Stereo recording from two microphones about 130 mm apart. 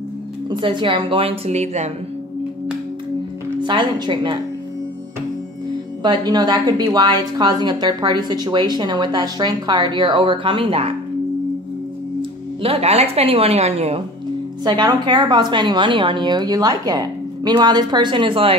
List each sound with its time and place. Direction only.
0.5 s speech: 40° right (ahead or behind); by 1.9 s 60° right (ahead or behind)
3.6 s a woman's voice: 35° right (ahead or behind)
6.0 s a woman's voice: 35° right (ahead or behind)
12.2 s speech: 50° right (ahead or behind)
14.6 s a woman's voice: 35° right (ahead or behind)